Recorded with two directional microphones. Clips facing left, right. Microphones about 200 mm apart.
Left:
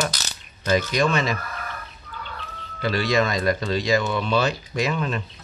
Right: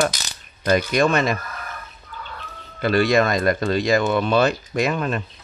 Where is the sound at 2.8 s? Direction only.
55° right (ahead or behind).